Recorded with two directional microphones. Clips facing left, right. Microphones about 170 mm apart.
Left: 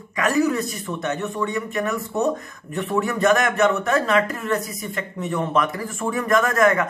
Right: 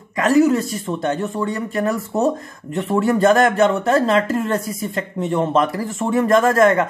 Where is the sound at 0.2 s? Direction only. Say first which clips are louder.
Right 5 dB; 30° right (ahead or behind).